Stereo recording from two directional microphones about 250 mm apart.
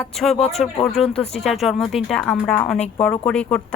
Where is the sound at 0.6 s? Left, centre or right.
Centre.